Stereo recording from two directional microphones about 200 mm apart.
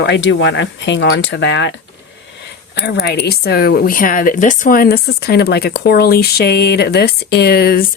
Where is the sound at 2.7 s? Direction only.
55° left (ahead or behind).